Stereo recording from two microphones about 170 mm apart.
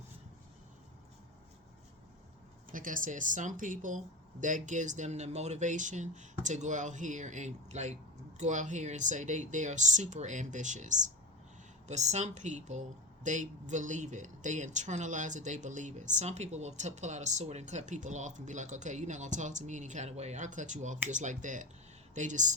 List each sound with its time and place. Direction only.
2.6 s speech: 50° right (ahead or behind)